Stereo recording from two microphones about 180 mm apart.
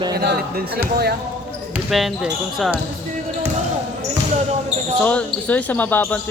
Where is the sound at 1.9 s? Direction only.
5° right (ahead or behind).